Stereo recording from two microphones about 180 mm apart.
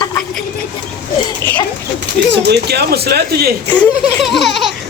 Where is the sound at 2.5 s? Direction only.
65° right (ahead or behind).